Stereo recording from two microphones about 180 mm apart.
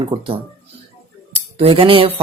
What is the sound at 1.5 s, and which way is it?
Cutlery, 30° right (ahead or behind).